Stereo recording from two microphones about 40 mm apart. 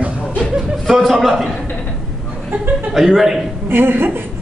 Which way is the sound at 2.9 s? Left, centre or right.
Centre.